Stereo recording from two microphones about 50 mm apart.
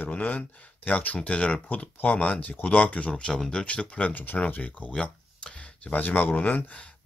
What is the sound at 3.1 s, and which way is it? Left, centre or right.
Speech, centre.